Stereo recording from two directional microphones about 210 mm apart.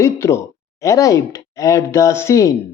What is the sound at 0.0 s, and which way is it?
Speech, 15° left (ahead or behind).